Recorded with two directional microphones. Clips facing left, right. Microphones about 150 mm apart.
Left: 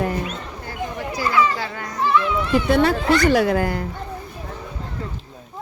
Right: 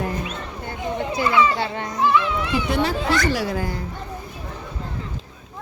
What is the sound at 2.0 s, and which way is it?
Speech, 5° right (ahead or behind).